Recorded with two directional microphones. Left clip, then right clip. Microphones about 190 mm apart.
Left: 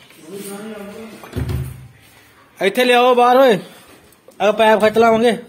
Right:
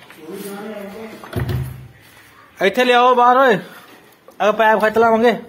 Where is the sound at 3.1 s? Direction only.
35° left (ahead or behind).